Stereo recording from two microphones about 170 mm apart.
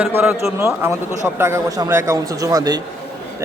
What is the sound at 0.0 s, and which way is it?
A man's voice, 10° right (ahead or behind).